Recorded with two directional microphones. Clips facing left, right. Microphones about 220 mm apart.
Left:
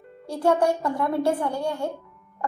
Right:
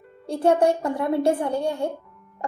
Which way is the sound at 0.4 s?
25° right (ahead or behind).